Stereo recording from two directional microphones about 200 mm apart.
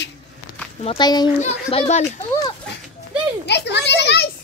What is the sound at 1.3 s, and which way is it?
Speech, 30° left (ahead or behind).